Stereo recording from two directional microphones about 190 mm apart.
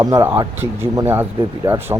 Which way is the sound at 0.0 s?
15° right (ahead or behind).